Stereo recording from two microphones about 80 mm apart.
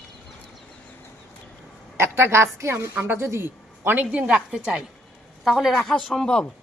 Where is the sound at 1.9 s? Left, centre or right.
Right; by 4.8 s centre.